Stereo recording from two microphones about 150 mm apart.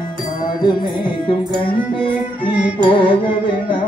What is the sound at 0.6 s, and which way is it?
Music, 30° left (ahead or behind).